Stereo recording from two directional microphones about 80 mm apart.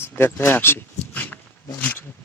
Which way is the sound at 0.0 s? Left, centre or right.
Left.